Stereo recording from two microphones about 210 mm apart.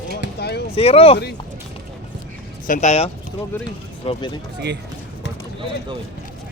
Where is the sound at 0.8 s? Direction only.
30° left (ahead or behind).